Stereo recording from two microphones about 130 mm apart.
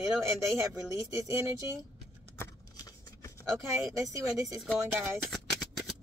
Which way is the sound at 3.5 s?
25° right (ahead or behind).